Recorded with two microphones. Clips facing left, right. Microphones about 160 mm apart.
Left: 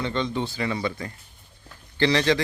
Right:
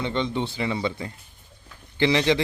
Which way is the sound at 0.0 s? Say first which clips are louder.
Right 1 dB; 20° right (ahead or behind).